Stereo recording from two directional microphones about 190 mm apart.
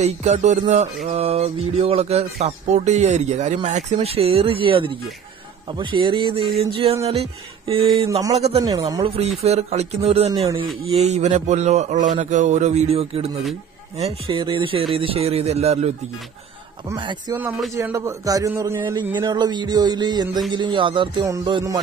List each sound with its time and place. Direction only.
0.0 s a man's voice: 35° right (ahead or behind)
8.6 s a man's voice: 20° right (ahead or behind)
9.4 s a man's voice: 35° right (ahead or behind)
16.9 s a man's voice: 25° right (ahead or behind)